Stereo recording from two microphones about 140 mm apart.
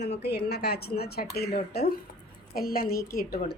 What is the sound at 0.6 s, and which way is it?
Speech, 90° left.